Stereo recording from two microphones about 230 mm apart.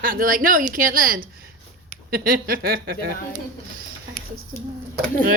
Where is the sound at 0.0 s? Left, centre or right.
Right.